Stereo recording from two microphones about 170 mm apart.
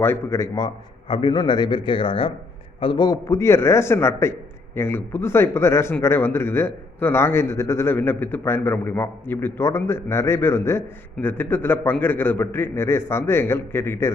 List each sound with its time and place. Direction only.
0.0 s a man's voice: 15° left (ahead or behind)